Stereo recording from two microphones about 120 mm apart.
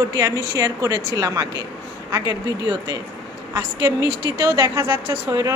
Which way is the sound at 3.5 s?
30° right (ahead or behind).